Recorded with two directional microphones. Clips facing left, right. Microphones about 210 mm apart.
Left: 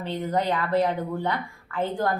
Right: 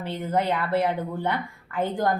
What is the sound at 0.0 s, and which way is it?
A woman's voice, 10° right (ahead or behind).